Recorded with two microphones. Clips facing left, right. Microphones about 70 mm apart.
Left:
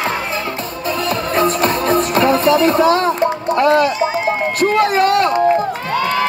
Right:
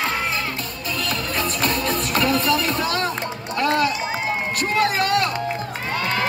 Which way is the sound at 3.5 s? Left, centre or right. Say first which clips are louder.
Left 6 dB; left.